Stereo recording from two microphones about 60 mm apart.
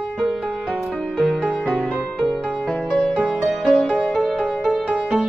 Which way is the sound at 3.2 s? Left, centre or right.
Right.